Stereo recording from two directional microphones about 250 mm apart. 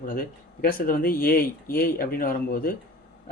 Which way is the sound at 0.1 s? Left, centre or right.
Left.